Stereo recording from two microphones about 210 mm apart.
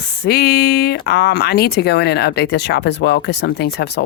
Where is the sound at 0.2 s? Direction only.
50° left (ahead or behind).